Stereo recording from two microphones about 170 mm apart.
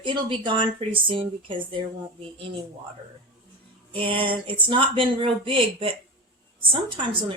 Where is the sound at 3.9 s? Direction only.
30° right (ahead or behind).